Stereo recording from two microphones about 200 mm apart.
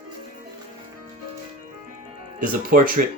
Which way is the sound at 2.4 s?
45° right (ahead or behind).